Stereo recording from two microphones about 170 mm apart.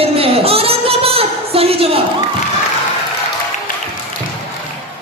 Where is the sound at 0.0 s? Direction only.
35° right (ahead or behind).